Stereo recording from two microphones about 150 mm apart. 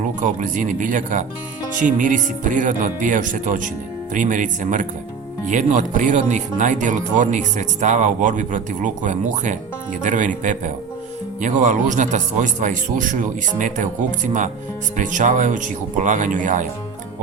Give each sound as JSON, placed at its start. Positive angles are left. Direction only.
{"t": 0.2, "sound": "speech", "side_deg": -55}